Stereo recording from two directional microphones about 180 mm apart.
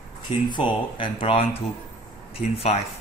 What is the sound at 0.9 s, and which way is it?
Speech, 30° left (ahead or behind).